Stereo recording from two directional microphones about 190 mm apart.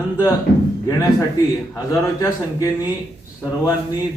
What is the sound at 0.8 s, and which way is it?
A man's voice, 15° left (ahead or behind).